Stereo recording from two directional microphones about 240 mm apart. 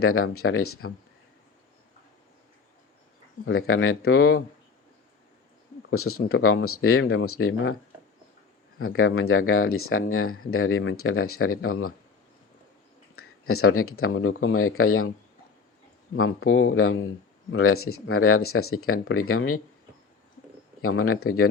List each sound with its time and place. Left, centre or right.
0.0 s speech: left
3.4 s speech: left
5.9 s speech: left
8.8 s speech: left
13.1 s speech: left
16.1 s speech: left
20.8 s speech: left